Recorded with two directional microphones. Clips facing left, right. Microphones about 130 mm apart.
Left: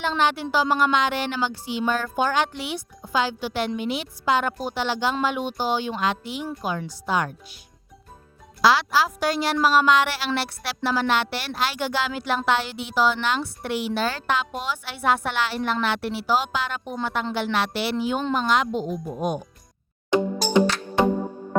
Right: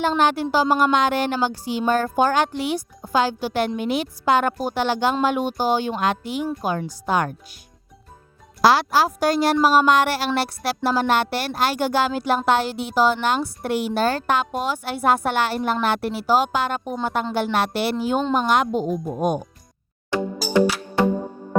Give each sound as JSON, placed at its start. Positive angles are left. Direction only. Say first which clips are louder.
{"t": 0.0, "sound": "a woman's voice", "louder": "right 4 dB", "side_deg": -45}
{"t": 8.6, "sound": "a woman's voice", "louder": "right 3 dB", "side_deg": -45}
{"t": 20.1, "sound": "music", "louder": "left 3 dB", "side_deg": 20}